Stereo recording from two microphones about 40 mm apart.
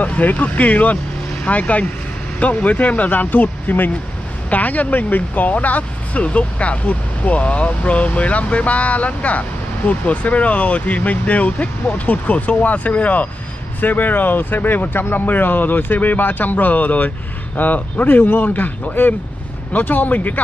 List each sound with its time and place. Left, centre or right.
0.0 s speech: left
4.5 s speech: left
18.0 s speech: left
18.5 s speech: left